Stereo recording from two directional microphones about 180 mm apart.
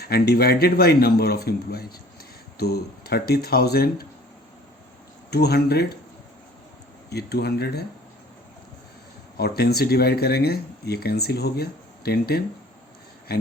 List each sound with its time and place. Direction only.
0.0 s speech: 60° left (ahead or behind)
5.3 s speech: 65° left (ahead or behind)
7.1 s speech: 65° left (ahead or behind)
9.4 s speech: 60° left (ahead or behind)